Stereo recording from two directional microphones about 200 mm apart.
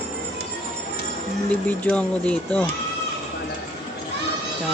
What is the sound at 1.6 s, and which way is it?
Speech, 5° left (ahead or behind).